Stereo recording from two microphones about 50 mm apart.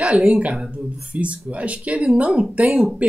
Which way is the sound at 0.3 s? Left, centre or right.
Right.